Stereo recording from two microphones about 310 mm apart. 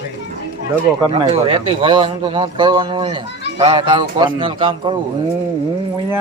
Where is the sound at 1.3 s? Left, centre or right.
Centre.